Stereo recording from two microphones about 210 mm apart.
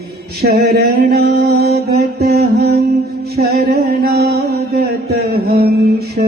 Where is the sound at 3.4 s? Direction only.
50° right (ahead or behind).